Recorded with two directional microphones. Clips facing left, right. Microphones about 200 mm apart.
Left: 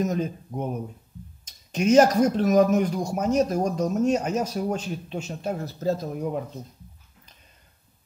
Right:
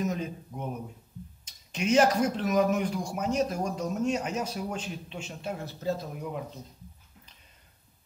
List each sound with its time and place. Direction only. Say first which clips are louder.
0.0 s speech: left 5 dB; 40° left (ahead or behind)